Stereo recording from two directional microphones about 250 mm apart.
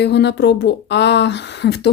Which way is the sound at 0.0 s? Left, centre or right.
Left.